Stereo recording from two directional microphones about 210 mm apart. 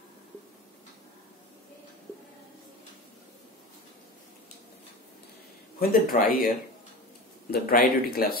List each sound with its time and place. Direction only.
5.8 s a man's voice: 45° left (ahead or behind)
7.5 s a man's voice: 45° left (ahead or behind)